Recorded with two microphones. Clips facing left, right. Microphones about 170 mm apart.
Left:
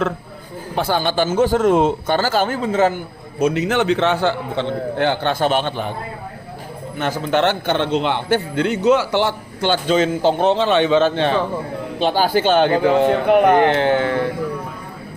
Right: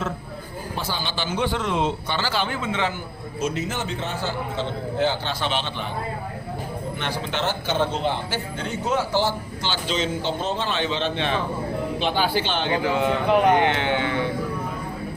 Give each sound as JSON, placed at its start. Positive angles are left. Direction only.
{"t": 0.8, "sound": "speech", "side_deg": 55}
{"t": 3.3, "sound": "a man's voice", "side_deg": 65}
{"t": 7.0, "sound": "speech", "side_deg": 45}
{"t": 7.4, "sound": "a man's voice", "side_deg": 70}
{"t": 11.0, "sound": "a man's voice", "side_deg": 40}
{"t": 12.8, "sound": "a man's voice", "side_deg": 35}
{"t": 13.1, "sound": "a man's voice", "side_deg": 55}
{"t": 13.7, "sound": "carnatic music", "side_deg": 40}